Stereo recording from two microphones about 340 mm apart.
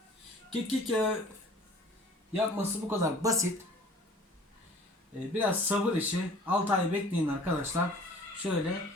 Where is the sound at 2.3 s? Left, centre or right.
Centre.